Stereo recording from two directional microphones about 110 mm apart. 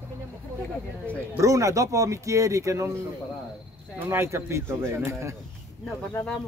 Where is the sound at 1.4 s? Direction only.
30° right (ahead or behind).